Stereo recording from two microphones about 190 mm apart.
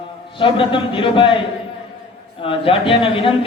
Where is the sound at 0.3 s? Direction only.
25° left (ahead or behind).